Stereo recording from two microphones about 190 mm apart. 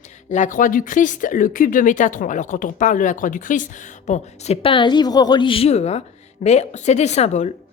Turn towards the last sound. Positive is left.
turn(degrees=35)  # may be behind; listen again after turning